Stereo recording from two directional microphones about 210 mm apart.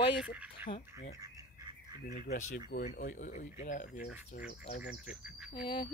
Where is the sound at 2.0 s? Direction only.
40° left (ahead or behind).